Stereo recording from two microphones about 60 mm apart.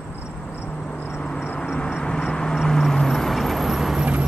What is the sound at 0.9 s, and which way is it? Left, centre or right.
Vehicle, left.